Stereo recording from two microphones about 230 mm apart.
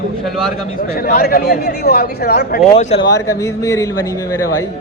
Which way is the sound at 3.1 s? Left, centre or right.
Centre.